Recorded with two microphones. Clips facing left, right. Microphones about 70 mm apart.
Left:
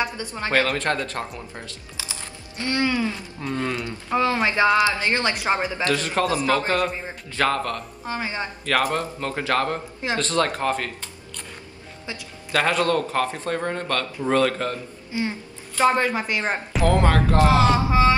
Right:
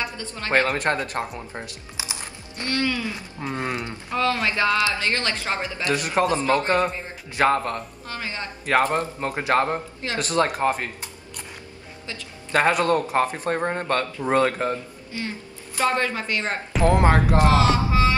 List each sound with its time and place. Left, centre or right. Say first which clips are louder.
0.0 s speech: left 4 dB; centre
0.5 s speech: right 1 dB; right
2.6 s speech: left 2 dB; left
3.3 s speech: even; right
4.1 s speech: left 2 dB; left
5.9 s speech: right 2 dB; right
7.3 s speech: right 2 dB; right
8.0 s speech: left 4 dB; left
8.6 s speech: right 2 dB; right
12.5 s speech: right 1 dB; right
15.1 s a woman's voice: left 5 dB; centre
16.8 s speech: right 1 dB; right
17.6 s speech: left 2 dB; left